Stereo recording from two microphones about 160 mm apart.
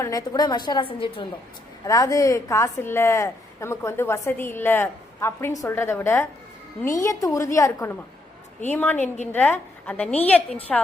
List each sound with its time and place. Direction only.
0.0 s a woman's voice: 20° left (ahead or behind)
1.8 s a woman's voice: 20° left (ahead or behind)